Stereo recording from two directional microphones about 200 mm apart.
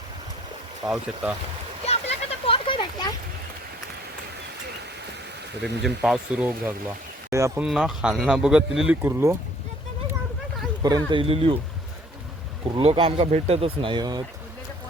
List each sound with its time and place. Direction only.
0.9 s speech: 5° right (ahead or behind)
1.9 s a sound: 30° left (ahead or behind)
5.8 s speech: centre (ahead or behind)
7.3 s speech: 15° right (ahead or behind)
7.6 s speech: centre (ahead or behind)
10.8 s speech: 20° right (ahead or behind)
12.6 s speech: 25° right (ahead or behind)